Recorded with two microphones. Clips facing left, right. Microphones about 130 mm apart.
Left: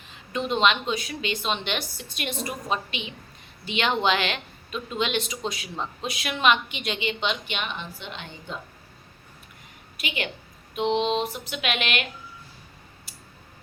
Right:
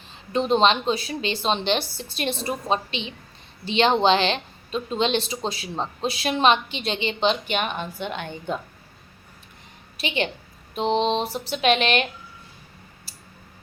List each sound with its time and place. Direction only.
0.1 s speech: 35° right (ahead or behind); by 8.5 s 55° right (ahead or behind)
10.0 s a woman's voice: 30° right (ahead or behind)
13.1 s a sound: 35° right (ahead or behind)